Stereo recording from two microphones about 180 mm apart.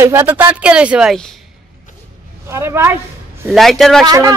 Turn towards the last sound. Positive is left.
turn(degrees=-20)  # may be behind; listen again after turning